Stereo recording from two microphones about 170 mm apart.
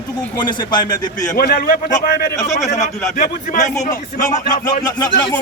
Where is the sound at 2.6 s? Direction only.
45° left (ahead or behind).